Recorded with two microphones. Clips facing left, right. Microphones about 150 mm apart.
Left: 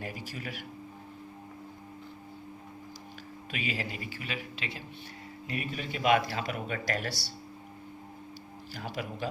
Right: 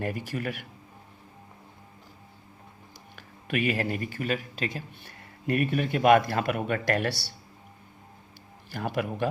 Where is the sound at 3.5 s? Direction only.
55° right (ahead or behind).